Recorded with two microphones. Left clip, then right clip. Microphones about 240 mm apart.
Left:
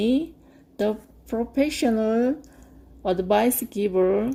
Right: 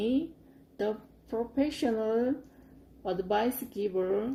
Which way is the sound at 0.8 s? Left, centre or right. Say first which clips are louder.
Left 7 dB; left.